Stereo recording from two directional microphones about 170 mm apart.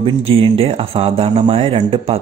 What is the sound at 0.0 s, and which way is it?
Speech, 35° right (ahead or behind).